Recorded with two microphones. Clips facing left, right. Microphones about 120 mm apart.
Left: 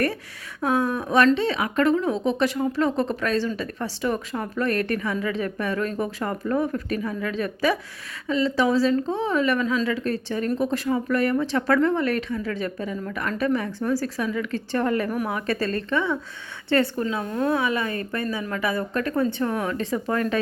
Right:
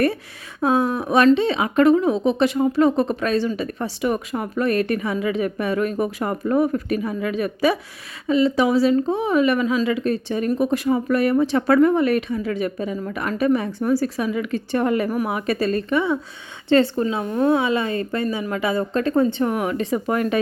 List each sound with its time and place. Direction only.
0.6 s speech: 15° right (ahead or behind)